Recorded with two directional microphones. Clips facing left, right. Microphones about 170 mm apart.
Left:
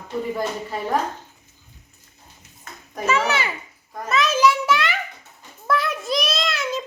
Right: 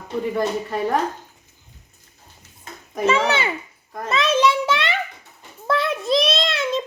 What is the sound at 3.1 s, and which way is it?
A child's voice, 30° right (ahead or behind).